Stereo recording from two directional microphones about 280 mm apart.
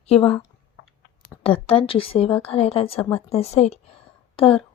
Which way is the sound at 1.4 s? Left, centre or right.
Centre.